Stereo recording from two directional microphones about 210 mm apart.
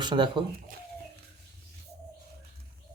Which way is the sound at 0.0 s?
20° right (ahead or behind).